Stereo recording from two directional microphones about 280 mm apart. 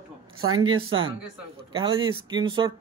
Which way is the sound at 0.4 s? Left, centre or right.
Right.